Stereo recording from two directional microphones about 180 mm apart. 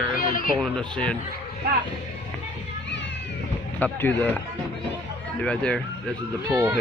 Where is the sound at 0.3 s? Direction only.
50° left (ahead or behind).